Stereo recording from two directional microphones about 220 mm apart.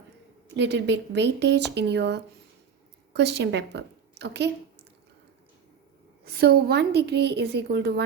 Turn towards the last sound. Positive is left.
turn(degrees=-50)  # may be behind; listen again after turning